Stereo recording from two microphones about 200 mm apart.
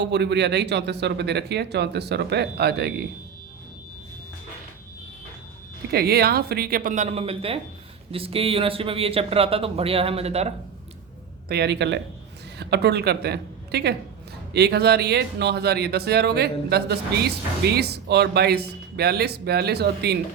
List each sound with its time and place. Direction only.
0.0 s speech: 60° right (ahead or behind)
5.9 s speech: 50° right (ahead or behind); by 10.5 s 30° right (ahead or behind)
11.4 s a woman's voice: 55° right (ahead or behind)